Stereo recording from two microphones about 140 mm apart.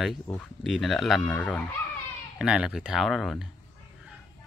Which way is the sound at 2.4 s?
5° right (ahead or behind).